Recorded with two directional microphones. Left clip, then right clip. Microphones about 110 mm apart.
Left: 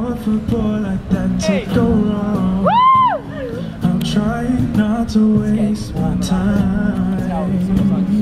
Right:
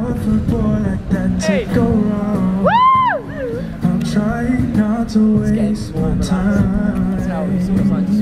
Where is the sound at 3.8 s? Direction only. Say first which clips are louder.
Left 1 dB; centre (ahead or behind).